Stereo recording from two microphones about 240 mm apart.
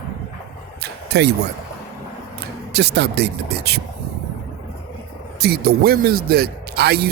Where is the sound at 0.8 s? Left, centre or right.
Right.